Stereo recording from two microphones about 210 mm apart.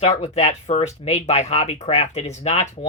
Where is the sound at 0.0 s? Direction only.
30° left (ahead or behind).